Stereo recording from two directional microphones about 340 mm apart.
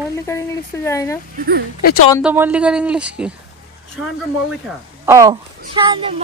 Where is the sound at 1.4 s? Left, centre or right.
Right.